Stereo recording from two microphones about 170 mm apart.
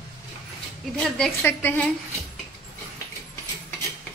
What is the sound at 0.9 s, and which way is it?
Speech, 5° left (ahead or behind).